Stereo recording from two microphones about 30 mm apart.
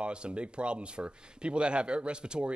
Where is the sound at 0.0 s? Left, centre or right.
Right.